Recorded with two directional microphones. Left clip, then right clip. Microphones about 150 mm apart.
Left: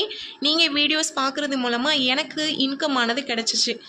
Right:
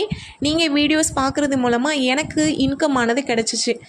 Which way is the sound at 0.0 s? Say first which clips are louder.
Right 1 dB; 50° right (ahead or behind).